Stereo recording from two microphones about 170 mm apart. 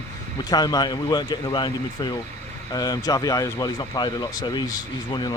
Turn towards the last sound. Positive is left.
turn(degrees=25)  # may be behind; listen again after turning